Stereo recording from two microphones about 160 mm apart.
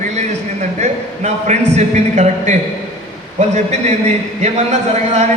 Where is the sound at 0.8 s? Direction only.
45° right (ahead or behind).